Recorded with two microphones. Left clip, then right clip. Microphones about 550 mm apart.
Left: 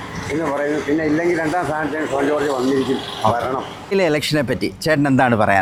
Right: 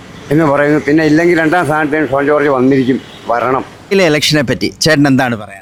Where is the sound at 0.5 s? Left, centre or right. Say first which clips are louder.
Right 8 dB; right.